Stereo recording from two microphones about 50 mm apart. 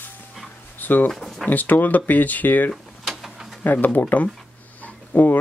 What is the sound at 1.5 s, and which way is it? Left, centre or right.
Speech, left.